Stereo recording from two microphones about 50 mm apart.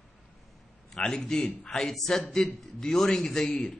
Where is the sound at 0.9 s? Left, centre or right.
Centre.